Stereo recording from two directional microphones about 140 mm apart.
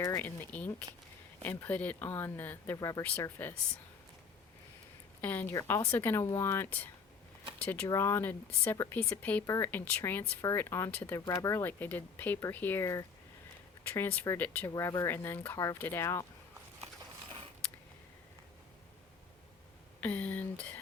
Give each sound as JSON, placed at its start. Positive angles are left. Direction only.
{"t": 0.0, "sound": "speech", "side_deg": 20}
{"t": 3.0, "sound": "speech", "side_deg": 10}
{"t": 5.2, "sound": "speech", "side_deg": 15}
{"t": 20.0, "sound": "speech", "side_deg": 10}